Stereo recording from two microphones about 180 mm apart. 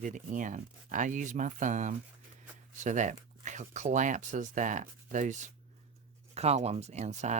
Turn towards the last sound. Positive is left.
turn(degrees=-40)  # may be behind; listen again after turning